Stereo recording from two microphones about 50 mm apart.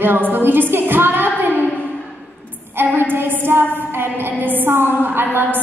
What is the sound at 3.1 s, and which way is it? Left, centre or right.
A woman's voice, right.